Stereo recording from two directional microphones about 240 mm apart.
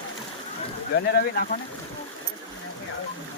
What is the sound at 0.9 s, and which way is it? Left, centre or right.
Speech, left.